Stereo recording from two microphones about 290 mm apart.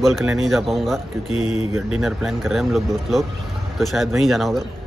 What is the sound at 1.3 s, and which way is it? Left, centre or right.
Speech, right.